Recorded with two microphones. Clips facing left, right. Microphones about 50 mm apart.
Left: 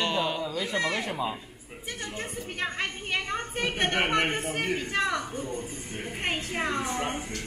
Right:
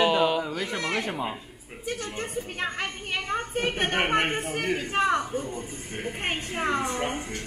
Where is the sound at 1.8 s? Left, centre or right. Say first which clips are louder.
Right 4 dB; right.